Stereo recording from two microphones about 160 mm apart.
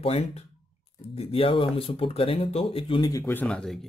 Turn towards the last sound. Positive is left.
turn(degrees=5)  # may be behind; listen again after turning